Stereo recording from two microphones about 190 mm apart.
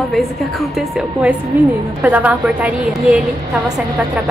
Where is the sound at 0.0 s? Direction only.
Centre (ahead or behind).